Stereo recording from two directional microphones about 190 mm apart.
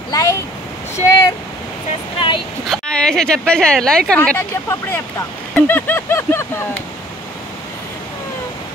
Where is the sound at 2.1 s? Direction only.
25° left (ahead or behind).